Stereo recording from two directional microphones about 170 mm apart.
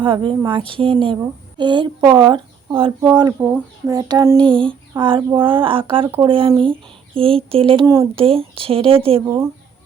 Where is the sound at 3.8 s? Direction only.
25° right (ahead or behind).